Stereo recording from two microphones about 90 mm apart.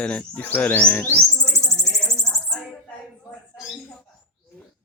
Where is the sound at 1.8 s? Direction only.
5° left (ahead or behind).